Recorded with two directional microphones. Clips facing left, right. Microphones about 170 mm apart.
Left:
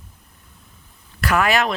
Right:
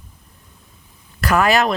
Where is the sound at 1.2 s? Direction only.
40° right (ahead or behind).